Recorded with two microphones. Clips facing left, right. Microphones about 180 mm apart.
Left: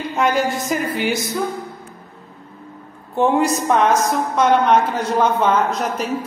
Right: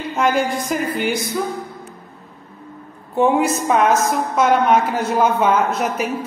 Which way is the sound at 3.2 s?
Centre (ahead or behind).